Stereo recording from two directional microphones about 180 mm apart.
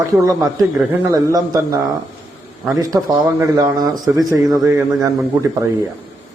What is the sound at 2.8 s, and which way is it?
Speech, 20° right (ahead or behind).